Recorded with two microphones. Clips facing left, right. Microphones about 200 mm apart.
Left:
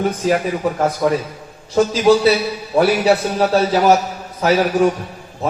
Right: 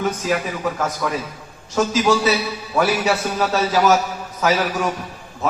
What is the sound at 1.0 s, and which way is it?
A man's voice, 30° left (ahead or behind).